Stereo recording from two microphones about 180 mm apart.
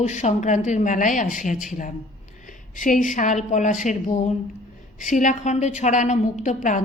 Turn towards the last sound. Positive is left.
turn(degrees=45)  # may be behind; listen again after turning